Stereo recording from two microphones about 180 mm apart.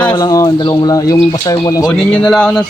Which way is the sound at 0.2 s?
20° left (ahead or behind).